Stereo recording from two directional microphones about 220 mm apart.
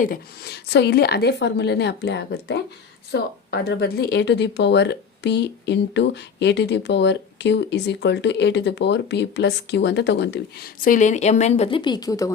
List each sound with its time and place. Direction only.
0.0 s speech: 40° left (ahead or behind); by 12.3 s 15° left (ahead or behind)